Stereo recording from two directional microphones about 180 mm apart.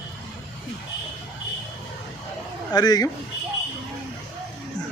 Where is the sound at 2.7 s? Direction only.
20° left (ahead or behind).